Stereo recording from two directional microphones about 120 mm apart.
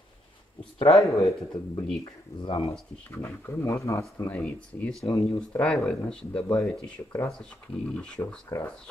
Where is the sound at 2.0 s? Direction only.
50° left (ahead or behind).